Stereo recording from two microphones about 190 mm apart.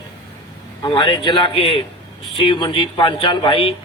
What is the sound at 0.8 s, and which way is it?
Speech, 25° left (ahead or behind).